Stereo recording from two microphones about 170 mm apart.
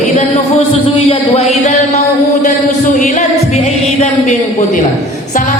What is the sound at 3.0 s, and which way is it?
Music, 45° left (ahead or behind).